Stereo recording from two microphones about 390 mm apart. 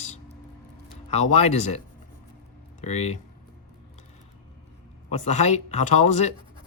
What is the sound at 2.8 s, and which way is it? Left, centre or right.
Speech, centre.